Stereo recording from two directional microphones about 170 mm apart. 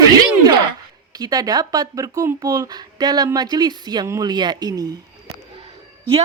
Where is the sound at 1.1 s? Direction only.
20° right (ahead or behind).